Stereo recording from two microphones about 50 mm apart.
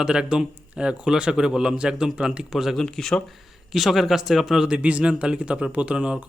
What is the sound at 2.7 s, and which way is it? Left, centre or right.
Speech, centre.